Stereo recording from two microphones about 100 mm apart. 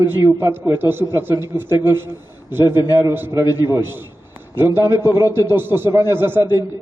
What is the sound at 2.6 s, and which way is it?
Speech, 40° left (ahead or behind).